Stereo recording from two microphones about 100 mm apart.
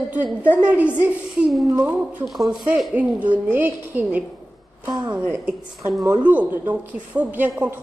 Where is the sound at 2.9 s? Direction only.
15° right (ahead or behind).